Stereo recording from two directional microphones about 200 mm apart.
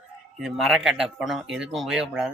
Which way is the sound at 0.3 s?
Centre (ahead or behind).